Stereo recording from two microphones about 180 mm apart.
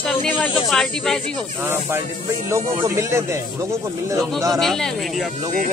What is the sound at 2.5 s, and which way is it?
Speech, 15° right (ahead or behind).